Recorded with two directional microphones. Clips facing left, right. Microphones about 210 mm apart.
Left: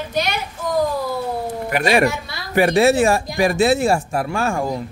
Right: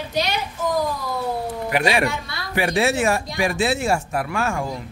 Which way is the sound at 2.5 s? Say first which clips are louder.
Left 6 dB; 40° left (ahead or behind).